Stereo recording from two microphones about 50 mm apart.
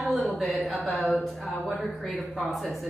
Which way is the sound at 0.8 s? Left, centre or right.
Left.